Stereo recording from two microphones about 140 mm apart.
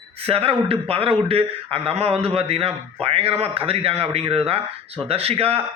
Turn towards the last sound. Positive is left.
turn(degrees=-45)  # may be behind; listen again after turning